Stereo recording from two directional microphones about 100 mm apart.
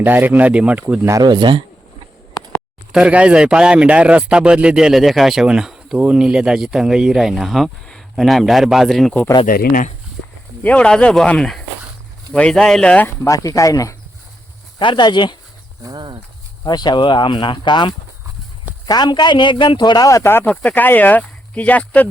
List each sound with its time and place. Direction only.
0.0 s speech: 20° right (ahead or behind)
1.2 s a man's voice: 50° right (ahead or behind)
2.9 s speech: 10° right (ahead or behind)
10.6 s speech: 10° left (ahead or behind)
13.2 s speech: 35° left (ahead or behind)
14.8 s speech: 50° left (ahead or behind)
15.8 s speech: 45° right (ahead or behind)
16.6 s speech: 45° left (ahead or behind)
20.1 s speech: 30° left (ahead or behind)
20.5 s speech: 10° left (ahead or behind)